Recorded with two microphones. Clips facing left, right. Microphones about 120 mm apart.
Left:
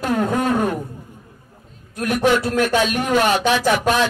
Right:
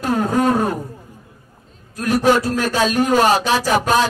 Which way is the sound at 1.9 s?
35° right (ahead or behind).